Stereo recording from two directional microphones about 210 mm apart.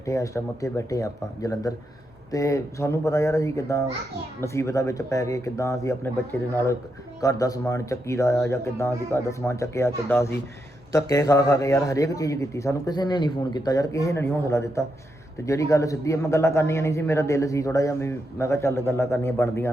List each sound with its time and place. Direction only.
0.0 s a man's voice: 15° left (ahead or behind)